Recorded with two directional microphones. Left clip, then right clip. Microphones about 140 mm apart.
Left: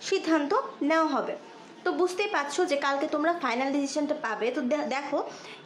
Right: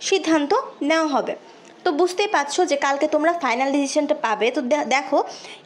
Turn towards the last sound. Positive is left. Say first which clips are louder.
# right 9 dB
turn(degrees=-30)  # may be behind; listen again after turning